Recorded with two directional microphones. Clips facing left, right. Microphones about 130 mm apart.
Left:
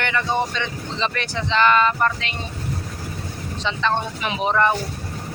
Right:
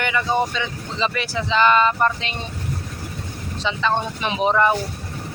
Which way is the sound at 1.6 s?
20° right (ahead or behind).